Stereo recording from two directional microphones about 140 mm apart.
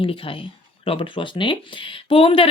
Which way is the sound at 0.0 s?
40° left (ahead or behind).